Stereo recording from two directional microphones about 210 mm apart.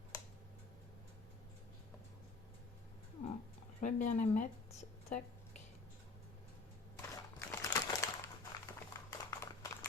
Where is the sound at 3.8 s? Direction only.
35° left (ahead or behind).